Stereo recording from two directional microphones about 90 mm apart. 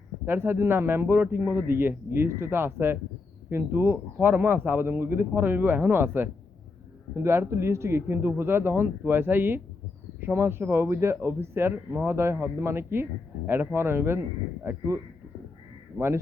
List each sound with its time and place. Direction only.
0.3 s a man's voice: 25° right (ahead or behind)